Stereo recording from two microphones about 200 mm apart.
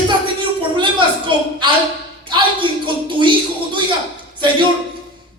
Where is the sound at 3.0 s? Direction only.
25° right (ahead or behind).